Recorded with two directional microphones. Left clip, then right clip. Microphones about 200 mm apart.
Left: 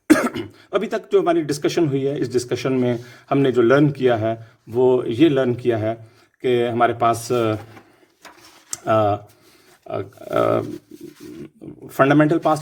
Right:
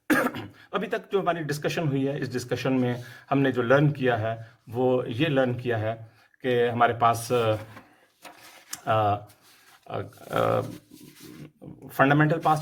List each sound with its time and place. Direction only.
0.1 s speech: 45° left (ahead or behind)
8.8 s speech: 40° left (ahead or behind)
11.9 s speech: 40° left (ahead or behind)